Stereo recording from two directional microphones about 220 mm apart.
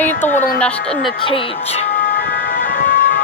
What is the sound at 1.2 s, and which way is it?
Music, 25° left (ahead or behind).